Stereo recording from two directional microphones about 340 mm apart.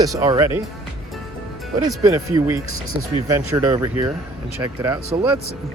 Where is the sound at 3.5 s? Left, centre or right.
Centre.